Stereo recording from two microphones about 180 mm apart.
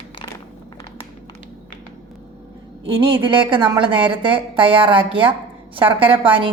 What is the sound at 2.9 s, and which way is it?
A woman's voice, 30° right (ahead or behind).